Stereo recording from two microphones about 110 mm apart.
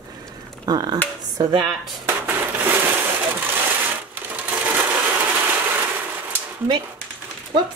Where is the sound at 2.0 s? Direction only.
20° right (ahead or behind).